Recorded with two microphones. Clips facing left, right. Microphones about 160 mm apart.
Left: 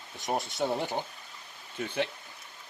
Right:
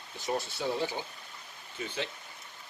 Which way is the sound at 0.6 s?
45° left (ahead or behind).